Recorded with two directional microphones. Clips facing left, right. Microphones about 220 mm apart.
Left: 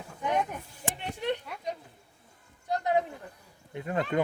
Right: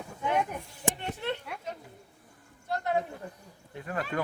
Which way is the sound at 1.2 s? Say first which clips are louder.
Left 3 dB; 15° left (ahead or behind).